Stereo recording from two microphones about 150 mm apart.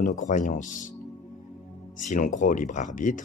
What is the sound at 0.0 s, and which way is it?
Speech, 55° left (ahead or behind).